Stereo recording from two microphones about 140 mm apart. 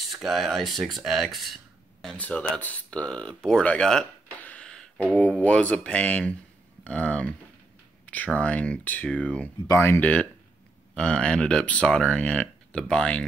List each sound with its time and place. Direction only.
0.0 s speech: centre (ahead or behind)